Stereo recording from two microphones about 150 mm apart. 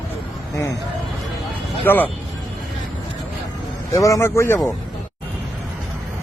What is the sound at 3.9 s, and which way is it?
Speech, 20° left (ahead or behind).